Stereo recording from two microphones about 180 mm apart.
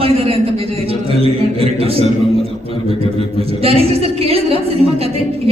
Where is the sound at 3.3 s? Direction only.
30° right (ahead or behind).